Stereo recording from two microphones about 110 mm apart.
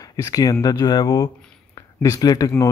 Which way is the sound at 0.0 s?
35° left (ahead or behind).